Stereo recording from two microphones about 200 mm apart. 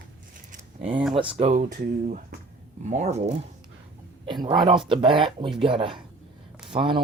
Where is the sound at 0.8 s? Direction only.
30° right (ahead or behind).